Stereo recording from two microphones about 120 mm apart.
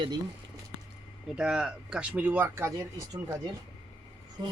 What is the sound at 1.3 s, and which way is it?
Speech, 10° right (ahead or behind).